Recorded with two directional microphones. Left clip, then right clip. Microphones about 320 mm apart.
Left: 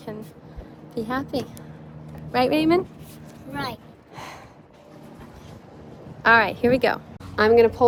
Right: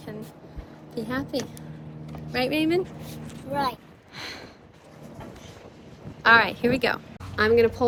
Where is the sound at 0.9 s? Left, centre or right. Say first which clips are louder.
Left 3 dB; centre.